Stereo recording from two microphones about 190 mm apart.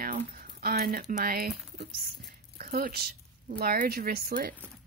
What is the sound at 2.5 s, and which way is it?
A woman's voice, 50° right (ahead or behind).